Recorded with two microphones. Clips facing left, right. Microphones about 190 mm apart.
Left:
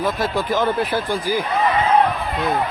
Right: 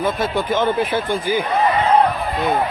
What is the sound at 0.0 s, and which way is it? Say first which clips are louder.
Speech: right 1 dB; centre (ahead or behind).